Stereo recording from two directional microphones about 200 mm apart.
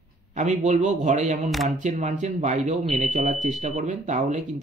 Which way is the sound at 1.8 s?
35° right (ahead or behind).